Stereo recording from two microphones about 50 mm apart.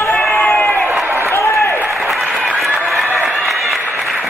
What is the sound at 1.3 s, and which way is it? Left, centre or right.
Applause, left.